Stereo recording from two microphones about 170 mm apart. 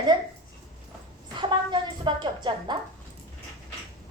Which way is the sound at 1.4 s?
25° right (ahead or behind).